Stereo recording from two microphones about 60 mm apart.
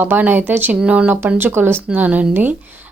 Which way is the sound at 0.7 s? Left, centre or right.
Centre.